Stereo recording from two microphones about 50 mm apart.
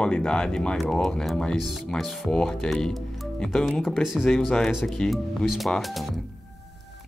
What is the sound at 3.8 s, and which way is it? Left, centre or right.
Speech, centre.